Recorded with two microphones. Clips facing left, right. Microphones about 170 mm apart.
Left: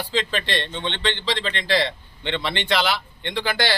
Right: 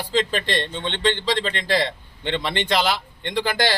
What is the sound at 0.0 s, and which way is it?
A man's voice, 40° right (ahead or behind).